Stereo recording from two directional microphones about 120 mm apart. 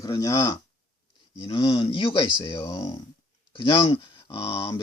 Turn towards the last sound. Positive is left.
turn(degrees=40)  # may be behind; listen again after turning